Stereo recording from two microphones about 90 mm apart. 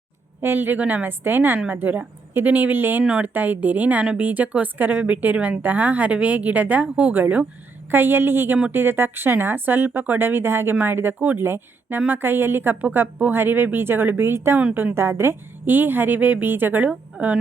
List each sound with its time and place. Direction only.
0.4 s speech: 25° right (ahead or behind)